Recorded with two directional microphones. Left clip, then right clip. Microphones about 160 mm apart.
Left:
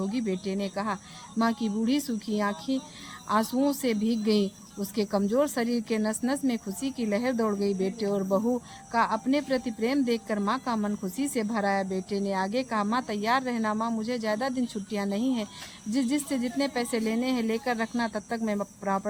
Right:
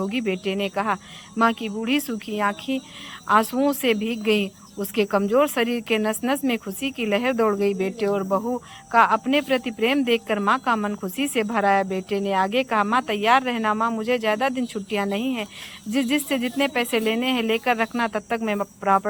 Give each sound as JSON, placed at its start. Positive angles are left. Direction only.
{"t": 0.1, "sound": "speech", "side_deg": -15}
{"t": 8.3, "sound": "speech", "side_deg": -35}
{"t": 8.9, "sound": "speech", "side_deg": -15}
{"t": 18.6, "sound": "speech", "side_deg": -25}